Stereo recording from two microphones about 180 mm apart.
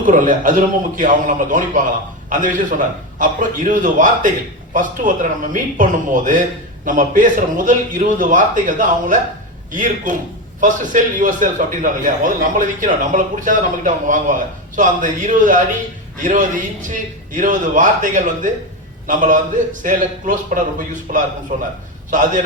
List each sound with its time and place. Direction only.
0.0 s a man's voice: 45° right (ahead or behind)